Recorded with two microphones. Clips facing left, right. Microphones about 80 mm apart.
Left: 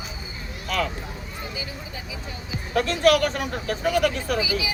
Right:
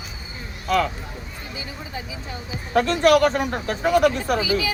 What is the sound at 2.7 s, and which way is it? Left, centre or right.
A man's voice, right.